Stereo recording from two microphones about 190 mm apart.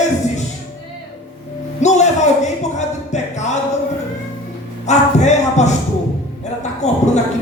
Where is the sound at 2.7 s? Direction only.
40° left (ahead or behind).